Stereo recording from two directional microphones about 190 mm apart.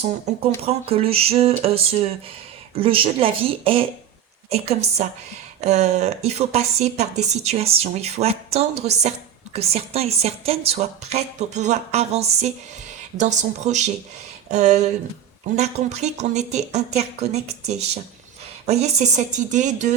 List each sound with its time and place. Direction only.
0.3 s a woman's voice: 35° right (ahead or behind)